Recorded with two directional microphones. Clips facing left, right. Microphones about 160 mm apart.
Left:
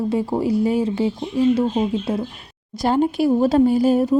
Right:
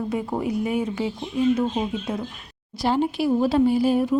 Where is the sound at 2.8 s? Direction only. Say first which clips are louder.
Left 4 dB; 45° left (ahead or behind).